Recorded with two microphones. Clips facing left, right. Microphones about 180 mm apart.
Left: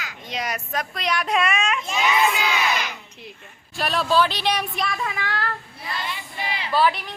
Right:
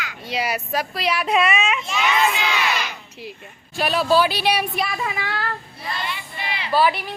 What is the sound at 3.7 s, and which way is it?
Speech, centre (ahead or behind).